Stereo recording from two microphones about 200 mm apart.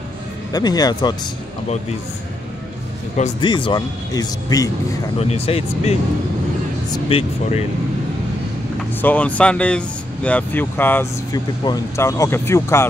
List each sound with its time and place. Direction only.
0.5 s speech: 20° left (ahead or behind)
3.3 s speech: 25° left (ahead or behind)
5.2 s speech: 30° left (ahead or behind)
9.0 s speech: 5° left (ahead or behind)